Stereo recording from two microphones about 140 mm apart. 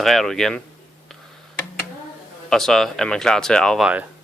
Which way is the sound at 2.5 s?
5° left (ahead or behind).